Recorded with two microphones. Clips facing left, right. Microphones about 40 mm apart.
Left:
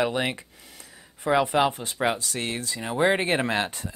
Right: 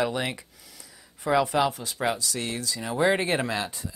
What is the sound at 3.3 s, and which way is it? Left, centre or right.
Speech, left.